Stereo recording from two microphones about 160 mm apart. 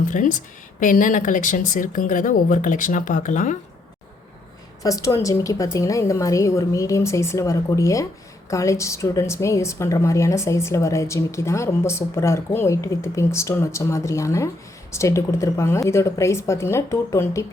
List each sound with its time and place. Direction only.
0.0 s a woman's voice: 55° left (ahead or behind)
4.8 s a woman's voice: 20° left (ahead or behind)